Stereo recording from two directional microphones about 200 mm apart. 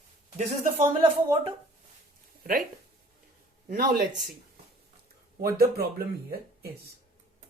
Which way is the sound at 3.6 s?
45° right (ahead or behind).